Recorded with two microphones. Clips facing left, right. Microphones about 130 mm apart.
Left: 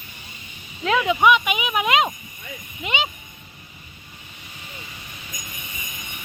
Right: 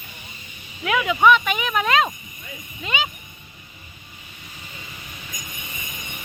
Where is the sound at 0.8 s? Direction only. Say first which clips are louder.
Left 2 dB; 25° left (ahead or behind).